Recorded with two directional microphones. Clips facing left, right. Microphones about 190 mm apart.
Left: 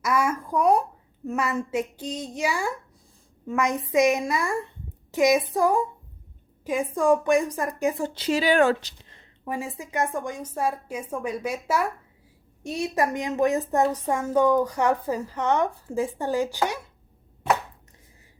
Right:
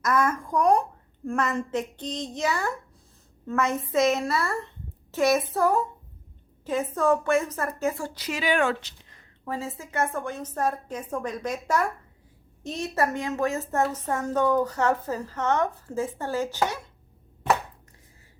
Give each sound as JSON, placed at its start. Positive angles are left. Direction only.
{"t": 0.0, "sound": "a woman's voice", "side_deg": 10}
{"t": 9.4, "sound": "a woman's voice", "side_deg": 15}